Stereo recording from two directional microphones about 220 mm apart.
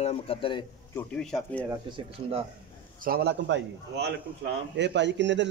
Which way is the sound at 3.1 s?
45° right (ahead or behind).